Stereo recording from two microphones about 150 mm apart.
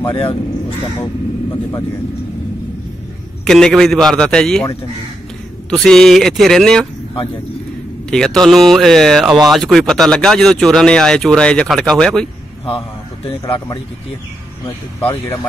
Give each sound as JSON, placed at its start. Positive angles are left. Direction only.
{"t": 0.2, "sound": "speech", "side_deg": 35}
{"t": 1.0, "sound": "speech", "side_deg": 20}
{"t": 3.4, "sound": "speech", "side_deg": 5}
{"t": 5.7, "sound": "speech", "side_deg": 5}
{"t": 8.1, "sound": "speech", "side_deg": 5}
{"t": 12.6, "sound": "a man's voice", "side_deg": 35}